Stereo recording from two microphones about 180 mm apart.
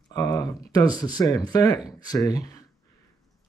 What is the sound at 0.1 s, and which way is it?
Speech, 20° left (ahead or behind).